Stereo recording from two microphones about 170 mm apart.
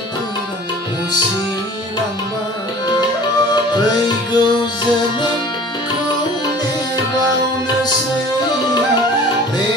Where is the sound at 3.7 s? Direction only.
25° left (ahead or behind).